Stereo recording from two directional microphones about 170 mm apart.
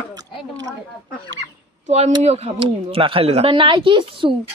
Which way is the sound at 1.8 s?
40° right (ahead or behind).